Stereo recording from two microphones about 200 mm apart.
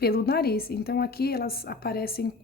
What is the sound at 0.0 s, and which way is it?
A woman's voice, 50° left (ahead or behind).